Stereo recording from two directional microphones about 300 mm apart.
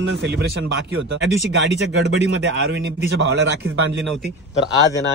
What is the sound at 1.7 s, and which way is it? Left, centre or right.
Speech, right.